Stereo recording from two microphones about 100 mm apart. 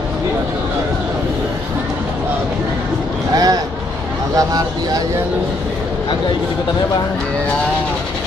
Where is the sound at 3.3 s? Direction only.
40° right (ahead or behind).